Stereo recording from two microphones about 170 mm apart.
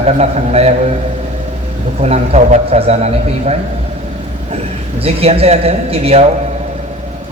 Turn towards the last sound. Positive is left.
turn(degrees=-35)  # may be behind; listen again after turning